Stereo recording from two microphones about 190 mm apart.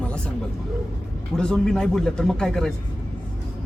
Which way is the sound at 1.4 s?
5° left (ahead or behind).